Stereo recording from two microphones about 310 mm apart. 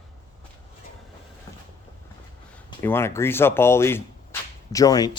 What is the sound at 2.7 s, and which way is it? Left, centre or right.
Speech, centre.